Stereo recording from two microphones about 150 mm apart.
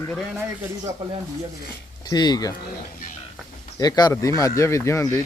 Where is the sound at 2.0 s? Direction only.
25° left (ahead or behind).